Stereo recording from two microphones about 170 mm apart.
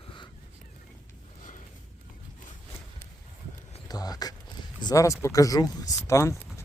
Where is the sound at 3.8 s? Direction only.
20° left (ahead or behind).